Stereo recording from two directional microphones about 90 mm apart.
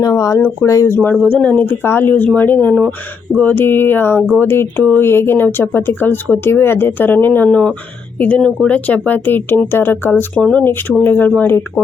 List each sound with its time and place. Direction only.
0.0 s speech: 40° left (ahead or behind)
1.1 s speech: 10° left (ahead or behind)
10.3 s speech: 10° left (ahead or behind)
10.6 s speech: 25° left (ahead or behind)